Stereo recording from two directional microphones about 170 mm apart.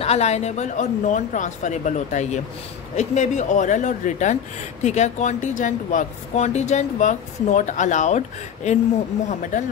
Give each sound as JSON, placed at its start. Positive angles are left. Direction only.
{"t": 0.0, "sound": "speech", "side_deg": 40}
{"t": 9.3, "sound": "speech", "side_deg": 45}